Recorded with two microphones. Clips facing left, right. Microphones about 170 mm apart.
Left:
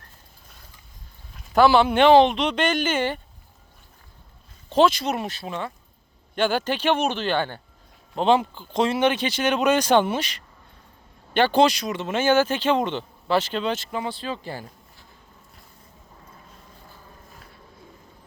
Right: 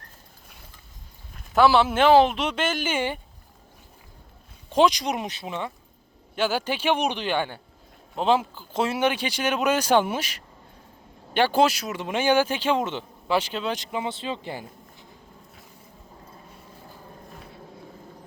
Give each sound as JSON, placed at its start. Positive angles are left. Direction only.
{"t": 1.5, "sound": "speech", "side_deg": 0}
{"t": 4.7, "sound": "speech", "side_deg": -15}
{"t": 6.3, "sound": "speech", "side_deg": -5}